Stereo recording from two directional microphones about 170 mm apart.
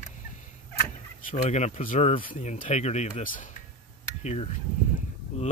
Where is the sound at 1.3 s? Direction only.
40° left (ahead or behind).